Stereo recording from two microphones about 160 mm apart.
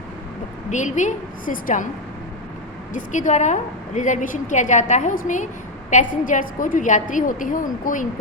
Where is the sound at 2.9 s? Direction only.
50° left (ahead or behind).